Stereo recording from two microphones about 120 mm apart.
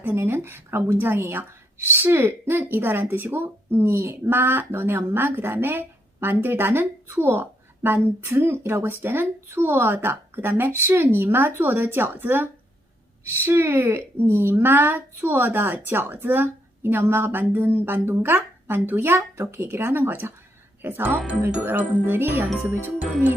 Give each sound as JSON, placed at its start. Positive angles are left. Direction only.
{"t": 0.0, "sound": "speech", "side_deg": -15}
{"t": 22.4, "sound": "speech", "side_deg": 0}